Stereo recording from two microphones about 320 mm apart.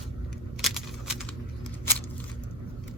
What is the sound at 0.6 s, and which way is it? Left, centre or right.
Typing, centre.